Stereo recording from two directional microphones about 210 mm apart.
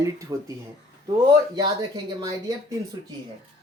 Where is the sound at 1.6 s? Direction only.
20° right (ahead or behind).